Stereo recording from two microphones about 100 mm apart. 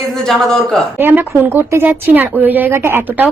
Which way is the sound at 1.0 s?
20° right (ahead or behind).